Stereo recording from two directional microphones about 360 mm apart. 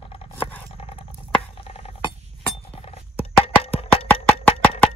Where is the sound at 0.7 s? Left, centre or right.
Centre.